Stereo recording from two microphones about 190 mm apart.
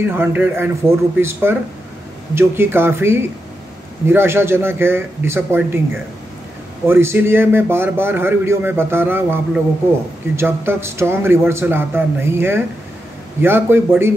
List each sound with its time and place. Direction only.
0.0 s a man's voice: 10° right (ahead or behind)
6.9 s a man's voice: 10° right (ahead or behind)